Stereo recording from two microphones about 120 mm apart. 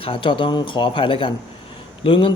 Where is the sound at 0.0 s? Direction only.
45° left (ahead or behind).